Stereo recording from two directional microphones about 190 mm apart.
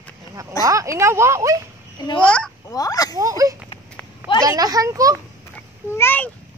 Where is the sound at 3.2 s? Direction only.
15° right (ahead or behind).